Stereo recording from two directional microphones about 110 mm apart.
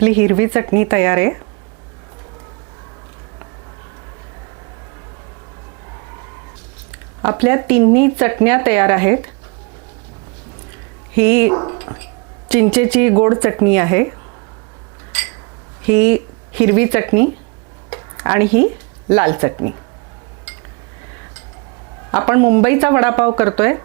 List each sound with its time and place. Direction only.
0.0 s speech: 20° right (ahead or behind)
7.2 s speech: 25° right (ahead or behind)
11.1 s speech: 20° right (ahead or behind)
15.1 s a sound: 15° right (ahead or behind)
15.8 s speech: 20° right (ahead or behind)
22.1 s speech: 25° right (ahead or behind)